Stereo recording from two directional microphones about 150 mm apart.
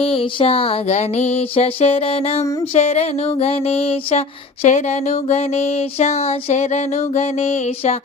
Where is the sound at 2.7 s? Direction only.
45° left (ahead or behind).